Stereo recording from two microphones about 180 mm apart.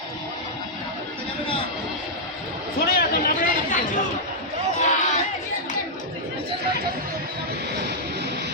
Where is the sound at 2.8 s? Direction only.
60° left (ahead or behind).